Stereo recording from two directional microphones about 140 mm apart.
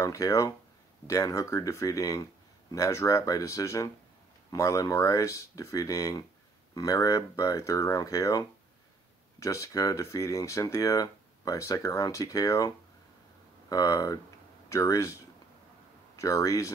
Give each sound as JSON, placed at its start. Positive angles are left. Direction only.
{"t": 0.0, "sound": "speech", "side_deg": 20}